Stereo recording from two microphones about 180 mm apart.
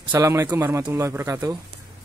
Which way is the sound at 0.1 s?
15° right (ahead or behind).